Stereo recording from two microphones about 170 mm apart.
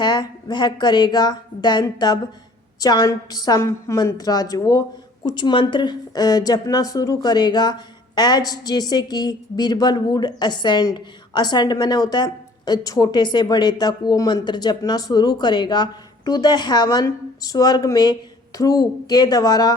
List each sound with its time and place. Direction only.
0.0 s speech: 25° left (ahead or behind)